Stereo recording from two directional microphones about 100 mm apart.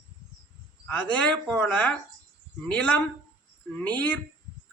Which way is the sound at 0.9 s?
15° left (ahead or behind).